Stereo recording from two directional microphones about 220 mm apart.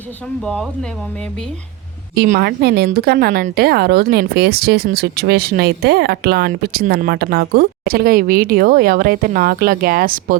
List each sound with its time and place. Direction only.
0.4 s speech: 5° left (ahead or behind)
2.1 s a woman's voice: 45° right (ahead or behind)